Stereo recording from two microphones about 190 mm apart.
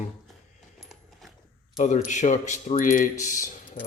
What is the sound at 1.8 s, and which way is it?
Speech, 40° left (ahead or behind).